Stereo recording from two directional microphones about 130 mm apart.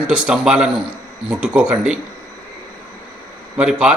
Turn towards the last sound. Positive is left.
turn(degrees=-5)  # may be behind; listen again after turning